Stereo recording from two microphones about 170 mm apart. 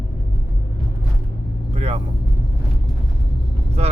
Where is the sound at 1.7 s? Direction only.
40° right (ahead or behind).